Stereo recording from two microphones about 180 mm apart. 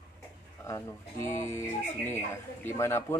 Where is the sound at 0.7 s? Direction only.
15° left (ahead or behind).